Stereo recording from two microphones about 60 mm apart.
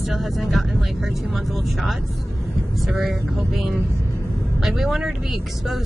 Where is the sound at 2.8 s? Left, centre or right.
Centre.